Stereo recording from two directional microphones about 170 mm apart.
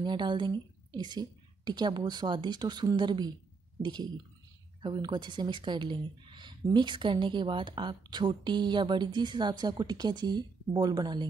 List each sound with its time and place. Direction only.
0.0 s speech: 25° right (ahead or behind)